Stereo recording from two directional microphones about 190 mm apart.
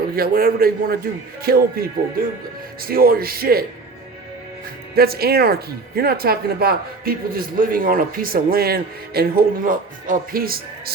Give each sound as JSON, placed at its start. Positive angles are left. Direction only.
{"t": 0.2, "sound": "speech", "side_deg": -50}
{"t": 4.9, "sound": "speech", "side_deg": -55}